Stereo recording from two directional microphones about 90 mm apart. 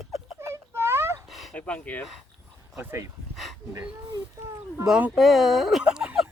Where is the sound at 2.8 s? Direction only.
25° right (ahead or behind).